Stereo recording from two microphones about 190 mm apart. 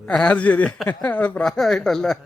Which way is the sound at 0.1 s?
5° left (ahead or behind).